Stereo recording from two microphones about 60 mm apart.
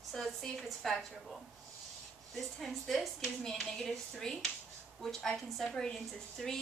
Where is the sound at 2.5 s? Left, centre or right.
Centre.